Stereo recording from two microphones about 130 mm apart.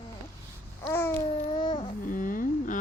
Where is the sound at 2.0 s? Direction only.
90° left.